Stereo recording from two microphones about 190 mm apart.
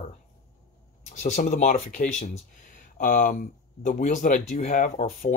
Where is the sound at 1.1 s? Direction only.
45° left (ahead or behind).